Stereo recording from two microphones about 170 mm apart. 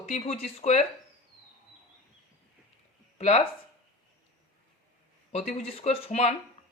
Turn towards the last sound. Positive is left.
turn(degrees=40)  # may be behind; listen again after turning